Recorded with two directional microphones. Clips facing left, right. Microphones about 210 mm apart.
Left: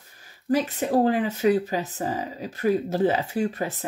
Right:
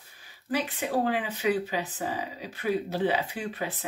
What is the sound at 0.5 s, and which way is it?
Speech, 40° left (ahead or behind).